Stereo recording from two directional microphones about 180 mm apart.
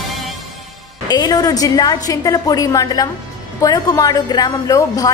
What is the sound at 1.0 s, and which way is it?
A woman's voice, 20° left (ahead or behind).